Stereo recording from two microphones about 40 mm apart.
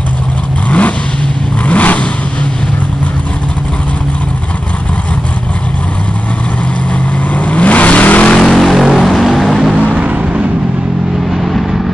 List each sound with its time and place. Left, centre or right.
0.7 s vehicle: left
7.3 s vehicle: left
8.5 s vehicle: centre
9.8 s vehicle: right